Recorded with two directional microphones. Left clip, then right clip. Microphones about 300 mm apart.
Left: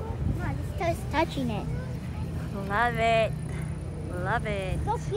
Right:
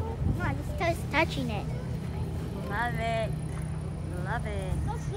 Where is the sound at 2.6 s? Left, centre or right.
Centre.